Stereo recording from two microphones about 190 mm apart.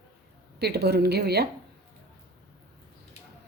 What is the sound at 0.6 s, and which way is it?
Speech, 60° right (ahead or behind).